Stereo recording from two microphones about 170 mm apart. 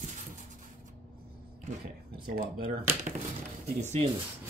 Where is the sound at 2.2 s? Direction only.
60° right (ahead or behind).